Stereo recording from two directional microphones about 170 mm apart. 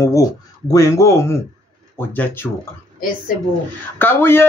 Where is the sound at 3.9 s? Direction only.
15° left (ahead or behind).